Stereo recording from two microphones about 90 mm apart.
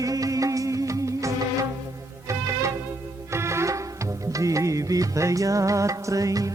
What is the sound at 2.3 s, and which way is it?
Music, 35° right (ahead or behind).